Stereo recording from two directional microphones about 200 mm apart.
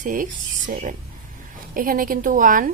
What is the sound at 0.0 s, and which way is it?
A woman's voice, 40° right (ahead or behind).